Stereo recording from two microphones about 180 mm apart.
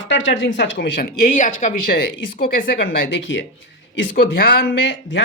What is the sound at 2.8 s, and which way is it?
Speech, 90° left.